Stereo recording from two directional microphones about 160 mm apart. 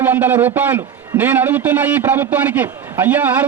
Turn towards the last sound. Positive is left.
turn(degrees=-10)  # may be behind; listen again after turning